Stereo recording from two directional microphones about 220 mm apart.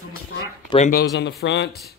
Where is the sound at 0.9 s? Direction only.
45° left (ahead or behind).